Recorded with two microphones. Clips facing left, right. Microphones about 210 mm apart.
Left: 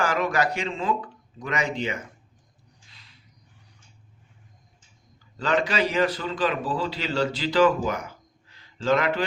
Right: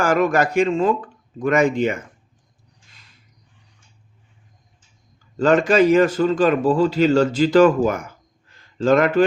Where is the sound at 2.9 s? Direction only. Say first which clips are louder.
Right 2 dB; 45° right (ahead or behind).